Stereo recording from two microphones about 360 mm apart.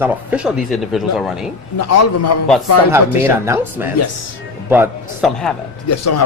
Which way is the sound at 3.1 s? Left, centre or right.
Centre.